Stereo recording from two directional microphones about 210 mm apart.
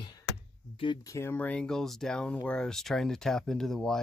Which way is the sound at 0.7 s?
20° left (ahead or behind).